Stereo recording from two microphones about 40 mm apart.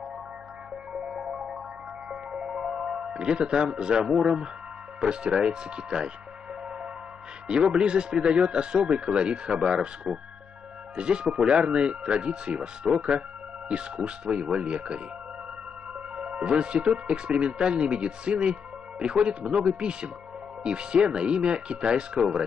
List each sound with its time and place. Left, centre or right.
0.9 s music: centre
5.0 s speech: right
7.4 s speech: right
16.2 s speech: right